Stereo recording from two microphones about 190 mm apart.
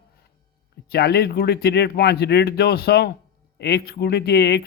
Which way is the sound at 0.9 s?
60° left (ahead or behind).